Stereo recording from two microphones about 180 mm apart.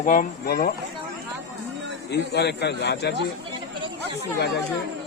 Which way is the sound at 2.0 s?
70° left (ahead or behind).